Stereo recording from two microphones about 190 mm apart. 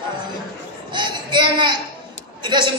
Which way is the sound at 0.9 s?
25° right (ahead or behind).